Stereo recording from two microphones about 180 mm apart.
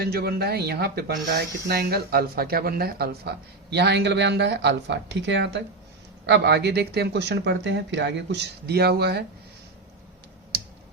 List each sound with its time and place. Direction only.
0.0 s speech: 60° right (ahead or behind)